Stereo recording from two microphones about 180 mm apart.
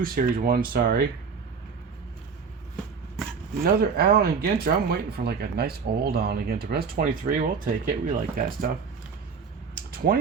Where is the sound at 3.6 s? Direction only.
60° right (ahead or behind).